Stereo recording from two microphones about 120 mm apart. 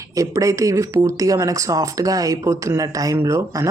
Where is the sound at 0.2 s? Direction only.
25° right (ahead or behind).